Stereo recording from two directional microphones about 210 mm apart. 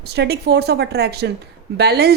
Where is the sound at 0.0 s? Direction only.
50° right (ahead or behind).